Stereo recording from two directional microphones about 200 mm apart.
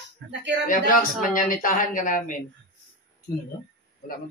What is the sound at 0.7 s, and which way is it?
Speech, 45° left (ahead or behind).